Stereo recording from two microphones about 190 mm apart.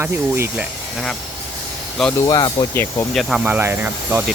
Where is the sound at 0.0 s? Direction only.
10° right (ahead or behind).